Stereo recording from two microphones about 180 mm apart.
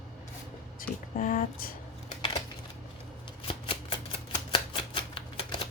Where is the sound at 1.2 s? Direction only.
50° left (ahead or behind).